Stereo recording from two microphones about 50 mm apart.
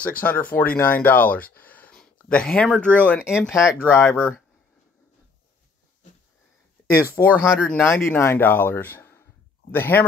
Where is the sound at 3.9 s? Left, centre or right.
Left.